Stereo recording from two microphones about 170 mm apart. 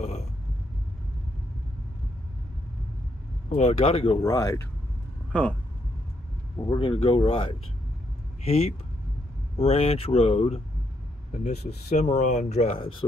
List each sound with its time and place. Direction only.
3.4 s speech: 40° left (ahead or behind)
4.2 s speech: 20° left (ahead or behind)
6.7 s speech: 30° left (ahead or behind)